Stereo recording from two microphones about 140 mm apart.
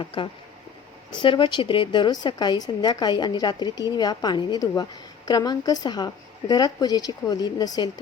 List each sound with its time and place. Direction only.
0.0 s a woman's voice: 40° left (ahead or behind)